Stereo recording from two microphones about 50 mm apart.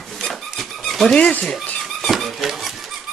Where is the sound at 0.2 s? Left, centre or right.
Centre.